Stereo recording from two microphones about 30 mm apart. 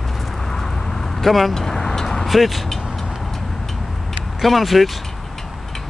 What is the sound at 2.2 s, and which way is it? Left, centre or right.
Speech, centre.